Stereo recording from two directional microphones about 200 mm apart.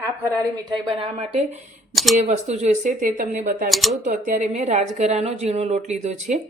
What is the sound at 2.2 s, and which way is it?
Speech, 35° right (ahead or behind).